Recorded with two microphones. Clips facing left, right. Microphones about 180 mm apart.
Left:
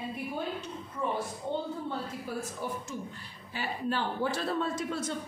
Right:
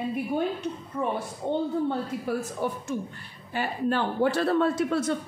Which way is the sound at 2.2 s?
65° right (ahead or behind).